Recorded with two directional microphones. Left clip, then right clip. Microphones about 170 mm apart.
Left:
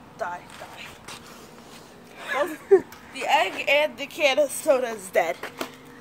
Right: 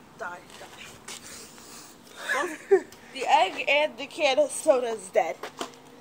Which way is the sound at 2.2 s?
5° left (ahead or behind).